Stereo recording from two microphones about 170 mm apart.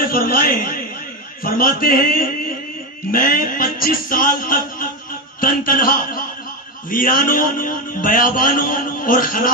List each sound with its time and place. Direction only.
0.1 s a man's voice: 60° left (ahead or behind)